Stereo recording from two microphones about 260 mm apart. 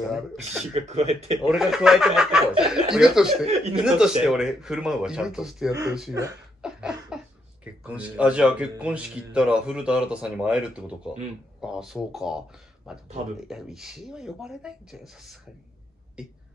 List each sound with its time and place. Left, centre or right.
0.1 s speech: centre
0.7 s speech: right
1.5 s speech: centre